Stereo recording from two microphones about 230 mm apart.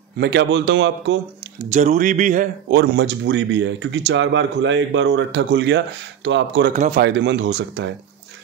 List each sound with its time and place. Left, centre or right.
0.2 s speech: right
1.6 s speech: right
2.7 s speech: right
6.7 s speech: right
7.0 s speech: right